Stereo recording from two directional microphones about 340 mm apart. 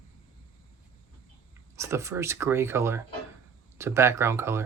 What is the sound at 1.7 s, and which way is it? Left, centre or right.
Speech, centre.